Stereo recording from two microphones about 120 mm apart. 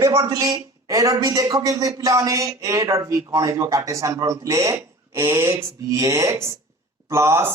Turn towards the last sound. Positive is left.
turn(degrees=-20)  # may be behind; listen again after turning